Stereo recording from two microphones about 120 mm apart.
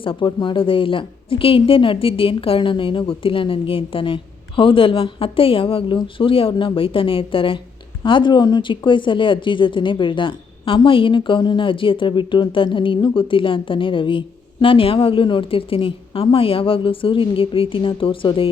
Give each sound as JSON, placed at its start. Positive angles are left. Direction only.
{"t": 0.0, "sound": "speech", "side_deg": 45}